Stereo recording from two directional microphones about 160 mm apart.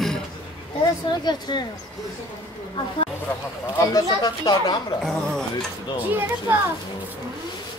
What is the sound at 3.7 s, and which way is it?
Speech, 20° left (ahead or behind).